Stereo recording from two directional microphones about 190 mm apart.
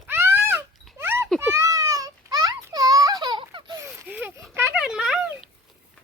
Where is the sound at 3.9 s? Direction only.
10° right (ahead or behind).